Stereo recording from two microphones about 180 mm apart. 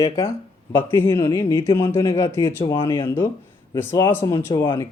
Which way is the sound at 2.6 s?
25° left (ahead or behind).